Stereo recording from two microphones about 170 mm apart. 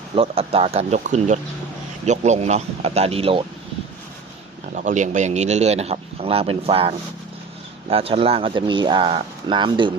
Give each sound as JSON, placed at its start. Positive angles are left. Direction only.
{"t": 0.2, "sound": "a man's voice", "side_deg": -35}
{"t": 4.7, "sound": "a man's voice", "side_deg": -45}